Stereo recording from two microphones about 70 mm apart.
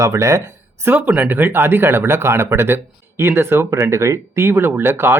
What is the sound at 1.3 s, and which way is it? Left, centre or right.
Speech, right.